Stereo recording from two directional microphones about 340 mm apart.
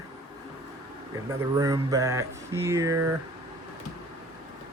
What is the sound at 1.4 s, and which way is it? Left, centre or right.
Speech, centre.